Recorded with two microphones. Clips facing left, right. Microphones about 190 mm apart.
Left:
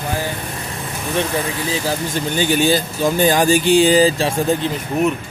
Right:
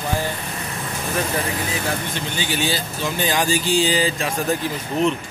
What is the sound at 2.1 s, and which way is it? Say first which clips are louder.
Speech: left 7 dB; 50° left (ahead or behind).